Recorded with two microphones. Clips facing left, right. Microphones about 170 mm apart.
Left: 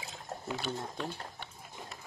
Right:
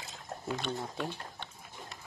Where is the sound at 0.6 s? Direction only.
5° left (ahead or behind).